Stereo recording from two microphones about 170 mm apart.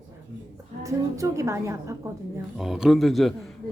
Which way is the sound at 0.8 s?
20° right (ahead or behind).